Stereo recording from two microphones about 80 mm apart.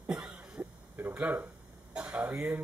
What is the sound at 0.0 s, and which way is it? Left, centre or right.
Cough, centre.